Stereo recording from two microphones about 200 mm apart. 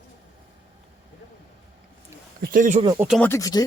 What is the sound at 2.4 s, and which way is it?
Speech, 45° right (ahead or behind).